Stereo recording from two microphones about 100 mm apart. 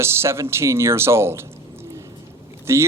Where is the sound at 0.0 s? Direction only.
25° right (ahead or behind).